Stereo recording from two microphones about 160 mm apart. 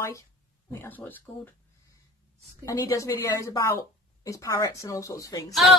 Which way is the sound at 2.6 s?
20° left (ahead or behind).